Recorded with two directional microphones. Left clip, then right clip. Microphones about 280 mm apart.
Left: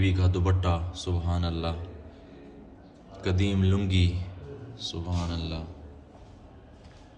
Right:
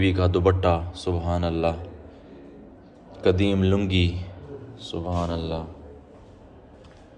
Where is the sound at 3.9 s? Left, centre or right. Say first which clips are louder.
Right 5 dB; right.